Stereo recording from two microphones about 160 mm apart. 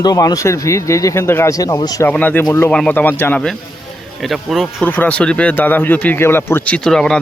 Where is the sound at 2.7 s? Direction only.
5° left (ahead or behind).